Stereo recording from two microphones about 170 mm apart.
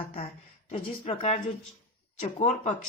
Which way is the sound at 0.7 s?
40° left (ahead or behind).